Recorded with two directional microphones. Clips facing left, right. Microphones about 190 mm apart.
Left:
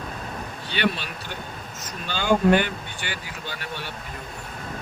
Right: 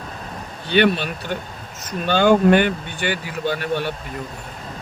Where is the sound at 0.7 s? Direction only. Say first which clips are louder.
Right 9 dB; 60° right (ahead or behind).